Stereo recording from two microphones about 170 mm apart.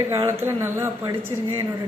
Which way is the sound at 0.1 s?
15° right (ahead or behind).